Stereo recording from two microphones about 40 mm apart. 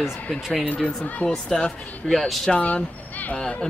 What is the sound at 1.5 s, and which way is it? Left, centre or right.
Speech, centre.